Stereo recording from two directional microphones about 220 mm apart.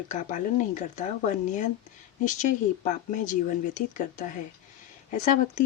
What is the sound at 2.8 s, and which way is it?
Speech, 35° left (ahead or behind).